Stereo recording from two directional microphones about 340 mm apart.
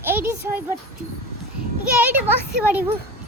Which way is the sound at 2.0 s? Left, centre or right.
Centre.